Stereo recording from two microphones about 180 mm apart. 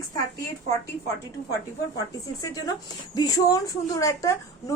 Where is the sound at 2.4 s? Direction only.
20° left (ahead or behind).